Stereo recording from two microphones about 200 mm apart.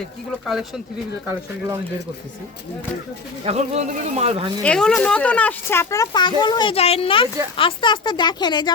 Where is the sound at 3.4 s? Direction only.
35° right (ahead or behind).